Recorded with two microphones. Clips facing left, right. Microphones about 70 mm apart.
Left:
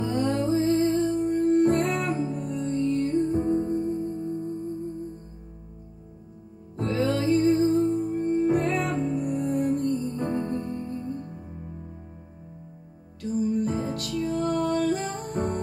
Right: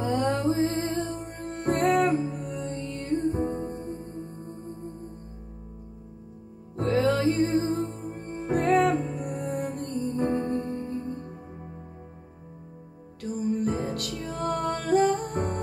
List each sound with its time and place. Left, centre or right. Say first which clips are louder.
0.0 s music: even; right
6.8 s music: right 2 dB; right
13.2 s music: left 2 dB; right